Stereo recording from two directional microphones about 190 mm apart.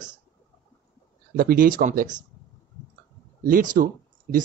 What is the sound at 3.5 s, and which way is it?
Speech, 45° right (ahead or behind).